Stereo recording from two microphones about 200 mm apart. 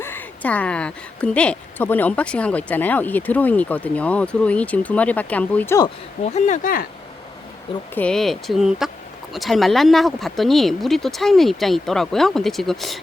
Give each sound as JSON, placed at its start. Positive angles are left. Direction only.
{"t": 0.0, "sound": "a woman's voice", "side_deg": 10}
{"t": 6.2, "sound": "speech", "side_deg": 35}
{"t": 7.9, "sound": "speech", "side_deg": 5}